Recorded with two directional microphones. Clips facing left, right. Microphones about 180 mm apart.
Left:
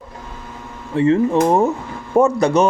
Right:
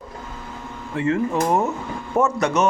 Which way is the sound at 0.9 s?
30° left (ahead or behind).